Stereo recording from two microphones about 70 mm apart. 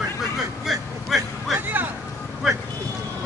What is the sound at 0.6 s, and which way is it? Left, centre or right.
Vehicle, centre.